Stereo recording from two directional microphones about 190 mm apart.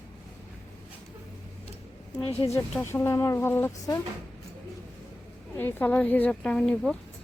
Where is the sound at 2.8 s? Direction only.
10° left (ahead or behind).